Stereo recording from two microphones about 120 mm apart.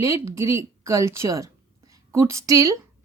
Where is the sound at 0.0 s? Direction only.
25° right (ahead or behind).